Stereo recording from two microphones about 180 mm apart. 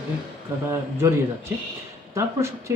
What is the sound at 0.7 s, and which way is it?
Speech, 15° right (ahead or behind).